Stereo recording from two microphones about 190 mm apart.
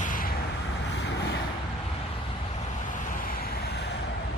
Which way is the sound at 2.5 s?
45° left (ahead or behind).